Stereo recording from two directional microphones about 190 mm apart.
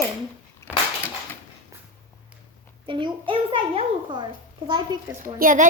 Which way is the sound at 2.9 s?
25° right (ahead or behind).